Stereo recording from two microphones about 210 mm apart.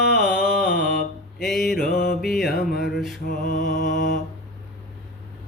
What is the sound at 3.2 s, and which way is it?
Music, 40° left (ahead or behind).